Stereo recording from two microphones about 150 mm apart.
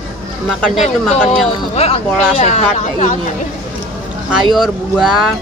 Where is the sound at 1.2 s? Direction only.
45° left (ahead or behind).